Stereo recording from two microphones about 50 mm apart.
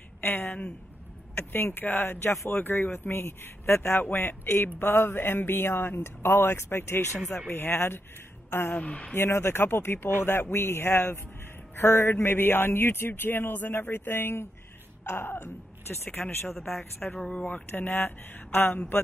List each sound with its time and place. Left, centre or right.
0.2 s a woman's voice: left
4.0 s a man's voice: left
7.4 s a man's voice: left
8.7 s speech: left
9.1 s a man's voice: left
17.0 s speech: centre
17.7 s a man's voice: left